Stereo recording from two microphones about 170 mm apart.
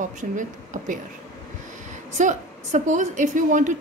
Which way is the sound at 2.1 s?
45° right (ahead or behind).